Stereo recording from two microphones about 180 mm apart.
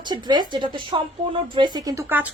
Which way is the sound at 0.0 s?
25° right (ahead or behind).